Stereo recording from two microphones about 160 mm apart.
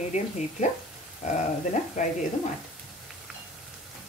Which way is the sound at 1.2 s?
45° left (ahead or behind).